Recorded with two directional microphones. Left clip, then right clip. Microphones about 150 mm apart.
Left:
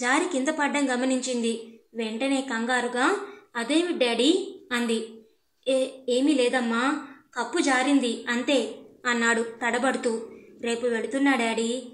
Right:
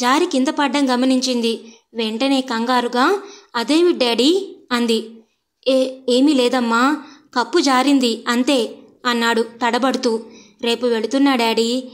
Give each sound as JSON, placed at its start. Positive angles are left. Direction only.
{"t": 0.0, "sound": "a woman's voice", "side_deg": -30}